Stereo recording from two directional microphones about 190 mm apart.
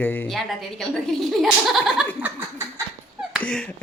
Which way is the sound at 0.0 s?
10° left (ahead or behind).